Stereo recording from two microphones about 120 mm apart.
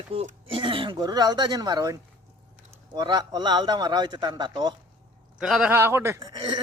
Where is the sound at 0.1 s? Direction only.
50° right (ahead or behind).